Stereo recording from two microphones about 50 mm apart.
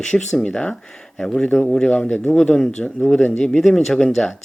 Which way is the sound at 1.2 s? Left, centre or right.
Centre.